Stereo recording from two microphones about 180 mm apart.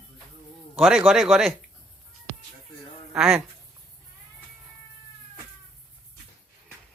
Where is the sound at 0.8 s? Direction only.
5° right (ahead or behind).